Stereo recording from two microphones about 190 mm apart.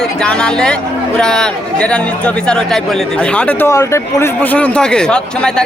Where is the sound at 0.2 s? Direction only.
5° left (ahead or behind).